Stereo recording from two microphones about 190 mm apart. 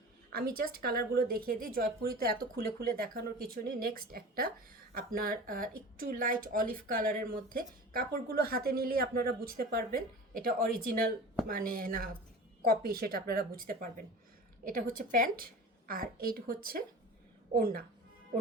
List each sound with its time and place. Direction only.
0.3 s speech: 50° right (ahead or behind)